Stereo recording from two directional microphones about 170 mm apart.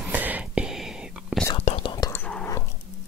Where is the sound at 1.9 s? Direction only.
15° left (ahead or behind).